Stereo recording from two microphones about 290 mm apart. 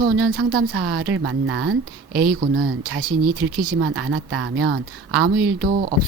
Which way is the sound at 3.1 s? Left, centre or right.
Right.